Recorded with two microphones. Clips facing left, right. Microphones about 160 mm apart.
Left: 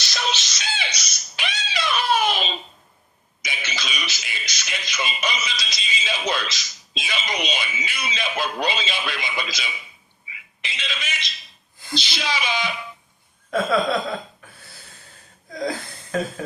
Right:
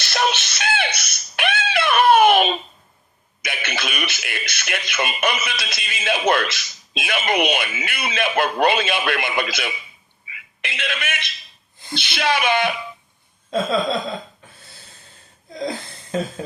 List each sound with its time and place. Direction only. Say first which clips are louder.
0.0 s a sound: right 6 dB; 60° right (ahead or behind)
3.4 s speech: right 5 dB; 55° right (ahead or behind)
10.2 s telephone: right 4 dB; 60° right (ahead or behind)
11.9 s speech: right 5 dB; 60° right (ahead or behind)
16.1 s speech: right 1 dB; 25° right (ahead or behind)